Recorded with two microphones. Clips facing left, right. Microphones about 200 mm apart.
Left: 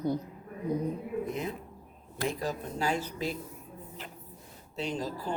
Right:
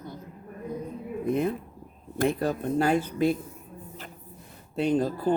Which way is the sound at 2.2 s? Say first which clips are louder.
Right 7 dB; 60° right (ahead or behind).